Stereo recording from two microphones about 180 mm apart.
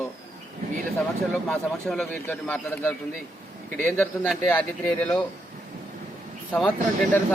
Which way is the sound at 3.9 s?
10° left (ahead or behind).